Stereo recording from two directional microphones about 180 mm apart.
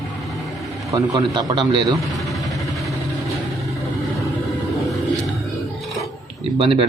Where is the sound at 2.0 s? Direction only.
Centre (ahead or behind).